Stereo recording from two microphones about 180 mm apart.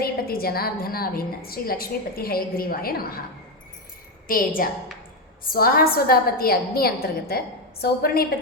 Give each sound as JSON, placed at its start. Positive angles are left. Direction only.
{"t": 0.0, "sound": "a woman's voice", "side_deg": 60}
{"t": 4.3, "sound": "a woman's voice", "side_deg": 50}